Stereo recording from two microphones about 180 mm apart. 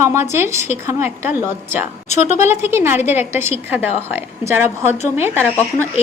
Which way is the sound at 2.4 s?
15° right (ahead or behind).